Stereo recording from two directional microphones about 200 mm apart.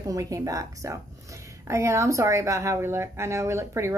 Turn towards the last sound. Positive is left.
turn(degrees=-15)  # may be behind; listen again after turning